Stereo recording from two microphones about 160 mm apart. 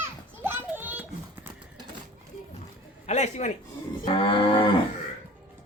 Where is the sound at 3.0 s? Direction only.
45° left (ahead or behind).